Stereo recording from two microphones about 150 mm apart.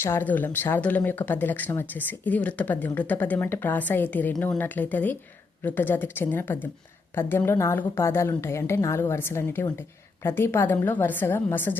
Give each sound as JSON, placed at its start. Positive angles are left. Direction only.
{"t": 0.0, "sound": "speech", "side_deg": 15}